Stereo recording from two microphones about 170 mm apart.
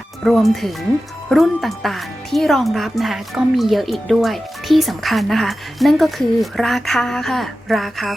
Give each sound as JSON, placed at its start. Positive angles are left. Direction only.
{"t": 0.3, "sound": "speech", "side_deg": 0}